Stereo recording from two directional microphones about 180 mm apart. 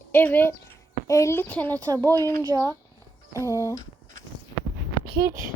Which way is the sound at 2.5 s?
20° right (ahead or behind).